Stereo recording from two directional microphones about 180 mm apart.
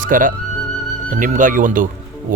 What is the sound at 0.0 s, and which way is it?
Speech, 45° right (ahead or behind).